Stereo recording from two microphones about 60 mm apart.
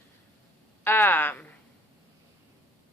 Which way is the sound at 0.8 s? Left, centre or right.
Left.